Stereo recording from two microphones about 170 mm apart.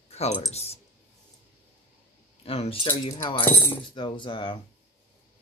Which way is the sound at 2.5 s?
35° left (ahead or behind).